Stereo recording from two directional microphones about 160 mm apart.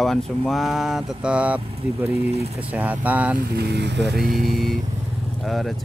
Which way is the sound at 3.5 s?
90° right.